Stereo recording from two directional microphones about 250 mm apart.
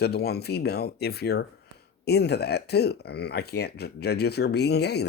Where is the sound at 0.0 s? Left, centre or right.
Left.